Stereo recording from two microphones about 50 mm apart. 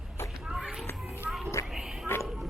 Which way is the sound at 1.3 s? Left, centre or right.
Centre.